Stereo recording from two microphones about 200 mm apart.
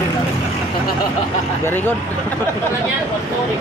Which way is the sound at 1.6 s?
10° left (ahead or behind).